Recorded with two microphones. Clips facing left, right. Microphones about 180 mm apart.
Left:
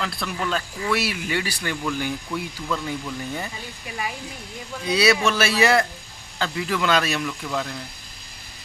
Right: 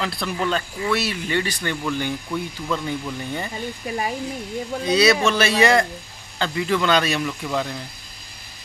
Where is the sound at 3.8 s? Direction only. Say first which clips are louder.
Right 4 dB; 40° right (ahead or behind).